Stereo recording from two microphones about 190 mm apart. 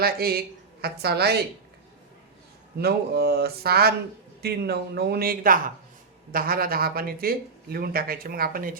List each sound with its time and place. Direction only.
0.0 s a woman's voice: 55° right (ahead or behind)
2.8 s speech: 55° right (ahead or behind)